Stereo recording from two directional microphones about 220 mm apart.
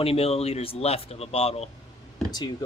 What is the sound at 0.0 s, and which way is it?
Speech, 25° left (ahead or behind).